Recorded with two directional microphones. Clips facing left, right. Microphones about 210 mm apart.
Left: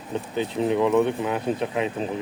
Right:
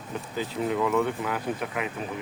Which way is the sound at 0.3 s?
20° left (ahead or behind).